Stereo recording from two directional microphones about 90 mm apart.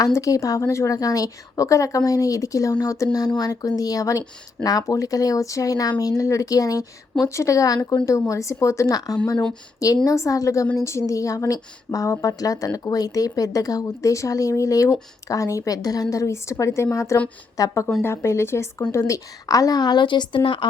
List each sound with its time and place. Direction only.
0.0 s a woman's voice: 40° left (ahead or behind); by 20.7 s 65° left (ahead or behind)